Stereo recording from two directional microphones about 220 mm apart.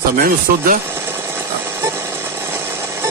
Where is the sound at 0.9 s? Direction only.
10° right (ahead or behind).